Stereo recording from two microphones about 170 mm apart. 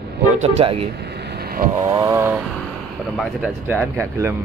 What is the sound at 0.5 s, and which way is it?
Speech, 35° right (ahead or behind).